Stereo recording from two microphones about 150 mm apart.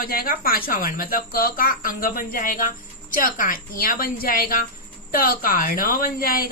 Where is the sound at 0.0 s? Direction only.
80° left.